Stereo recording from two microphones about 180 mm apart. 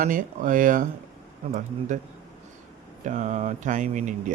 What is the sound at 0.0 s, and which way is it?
Speech, 45° right (ahead or behind).